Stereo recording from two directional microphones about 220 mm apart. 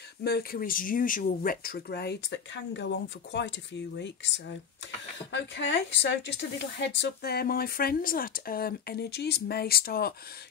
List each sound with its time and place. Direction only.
0.2 s speech: 45° left (ahead or behind)
5.3 s speech: 55° left (ahead or behind)